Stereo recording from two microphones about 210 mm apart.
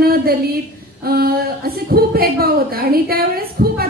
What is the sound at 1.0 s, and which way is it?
Speech, 45° right (ahead or behind).